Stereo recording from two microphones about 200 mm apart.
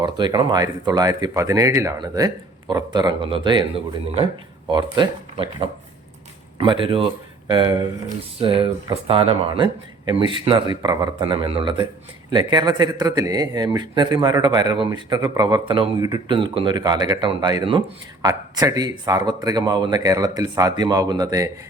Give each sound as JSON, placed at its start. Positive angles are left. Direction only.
{"t": 0.0, "sound": "speech", "side_deg": -25}